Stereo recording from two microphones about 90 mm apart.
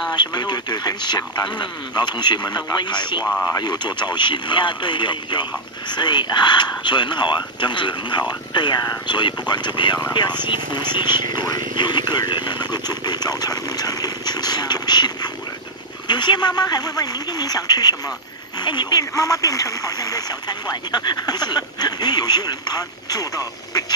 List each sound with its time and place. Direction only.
0.1 s speech: 50° left (ahead or behind)
3.3 s speech: 5° left (ahead or behind)
3.5 s speech: 50° left (ahead or behind)